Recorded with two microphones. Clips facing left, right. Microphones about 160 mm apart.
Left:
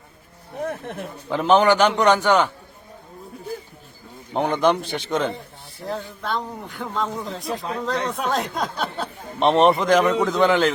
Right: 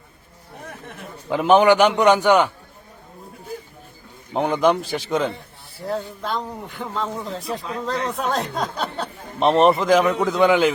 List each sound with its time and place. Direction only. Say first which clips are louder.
0.6 s a sound: left 10 dB; 55° left (ahead or behind)
1.3 s a man's voice: right 2 dB; 10° right (ahead or behind)
4.4 s speech: right 1 dB; centre (ahead or behind)